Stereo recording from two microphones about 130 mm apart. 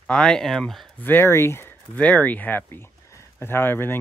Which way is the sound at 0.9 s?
15° left (ahead or behind).